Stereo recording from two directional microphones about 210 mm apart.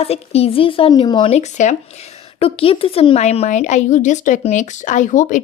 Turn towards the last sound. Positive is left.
turn(degrees=35)  # may be behind; listen again after turning